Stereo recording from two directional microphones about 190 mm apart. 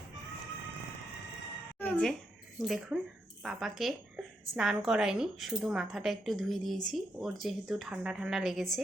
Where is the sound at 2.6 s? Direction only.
Centre (ahead or behind).